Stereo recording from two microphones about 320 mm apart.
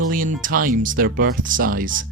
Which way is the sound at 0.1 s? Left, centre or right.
Right.